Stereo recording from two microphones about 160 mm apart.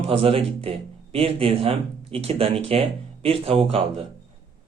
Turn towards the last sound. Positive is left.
turn(degrees=-35)  # may be behind; listen again after turning